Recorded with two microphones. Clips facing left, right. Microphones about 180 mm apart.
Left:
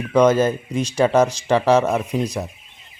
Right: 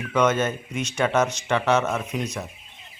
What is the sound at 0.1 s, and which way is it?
A man's voice, 35° left (ahead or behind).